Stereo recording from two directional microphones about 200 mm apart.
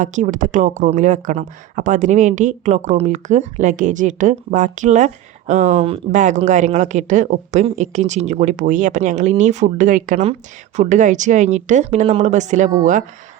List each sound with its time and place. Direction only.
0.0 s speech: 40° right (ahead or behind)